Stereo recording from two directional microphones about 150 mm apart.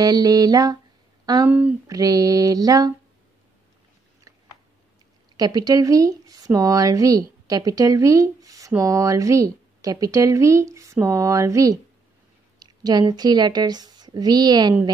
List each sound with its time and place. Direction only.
0.0 s speech: 25° right (ahead or behind)
1.5 s speech: 10° right (ahead or behind)
1.9 s speech: 25° right (ahead or behind)
4.3 s a sound: 20° right (ahead or behind)
5.4 s a woman's voice: 25° right (ahead or behind)